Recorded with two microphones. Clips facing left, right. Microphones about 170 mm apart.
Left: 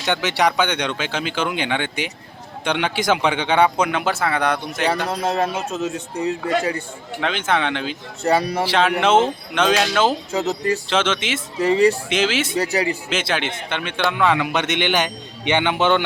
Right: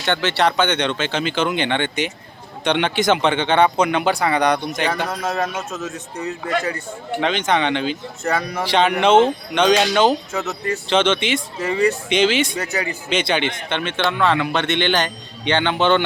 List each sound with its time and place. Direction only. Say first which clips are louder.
0.1 s speech: right 1 dB; 10° left (ahead or behind)
5.1 s a man's voice: left 2 dB; 30° left (ahead or behind)
7.2 s speech: right 2 dB; 5° left (ahead or behind)
8.2 s a man's voice: left 4 dB; 30° left (ahead or behind)
8.6 s speech: right 1 dB; 5° left (ahead or behind)
10.3 s a man's voice: left 3 dB; 35° left (ahead or behind)
10.8 s speech: right 3 dB; 5° left (ahead or behind)
11.6 s a man's voice: left 4 dB; 30° left (ahead or behind)
12.0 s speech: right 3 dB; 5° left (ahead or behind)
12.5 s a man's voice: left 4 dB; 30° left (ahead or behind)
13.1 s speech: right 3 dB; 5° left (ahead or behind)